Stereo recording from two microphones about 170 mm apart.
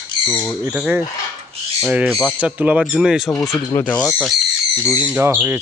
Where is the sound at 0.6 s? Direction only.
10° right (ahead or behind); by 4.3 s 10° left (ahead or behind).